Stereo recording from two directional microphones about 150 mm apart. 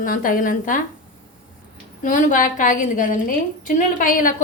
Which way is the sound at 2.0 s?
60° left (ahead or behind).